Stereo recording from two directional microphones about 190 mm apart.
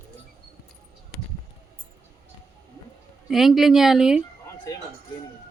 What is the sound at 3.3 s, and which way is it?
Speech, centre (ahead or behind).